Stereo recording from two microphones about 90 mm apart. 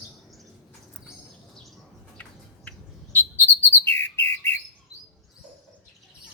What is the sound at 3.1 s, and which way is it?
Bird, 25° left (ahead or behind).